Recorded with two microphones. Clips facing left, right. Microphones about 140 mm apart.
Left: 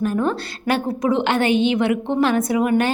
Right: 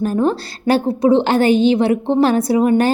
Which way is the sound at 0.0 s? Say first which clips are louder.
Right 4 dB; 35° right (ahead or behind).